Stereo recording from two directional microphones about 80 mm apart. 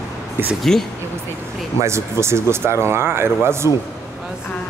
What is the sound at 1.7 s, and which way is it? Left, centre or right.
A man's voice, right.